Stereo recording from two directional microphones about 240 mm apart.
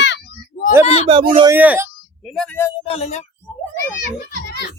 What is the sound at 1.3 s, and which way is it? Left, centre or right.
Speech, centre.